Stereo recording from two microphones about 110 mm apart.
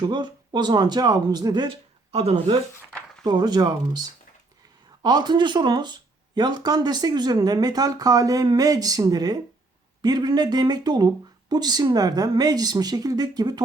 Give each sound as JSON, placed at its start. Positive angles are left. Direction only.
{"t": 0.0, "sound": "speech", "side_deg": -45}
{"t": 2.1, "sound": "speech", "side_deg": -65}
{"t": 3.2, "sound": "speech", "side_deg": -40}